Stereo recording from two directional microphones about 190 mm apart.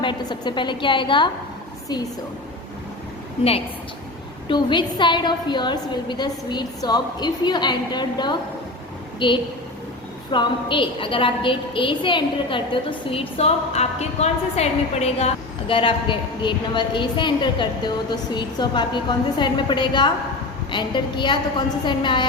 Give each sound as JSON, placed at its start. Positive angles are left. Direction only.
{"t": 0.0, "sound": "a woman's voice", "side_deg": 25}
{"t": 4.4, "sound": "a woman's voice", "side_deg": 25}